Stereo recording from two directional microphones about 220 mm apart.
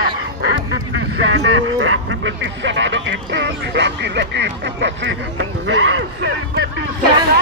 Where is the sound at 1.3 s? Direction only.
55° right (ahead or behind).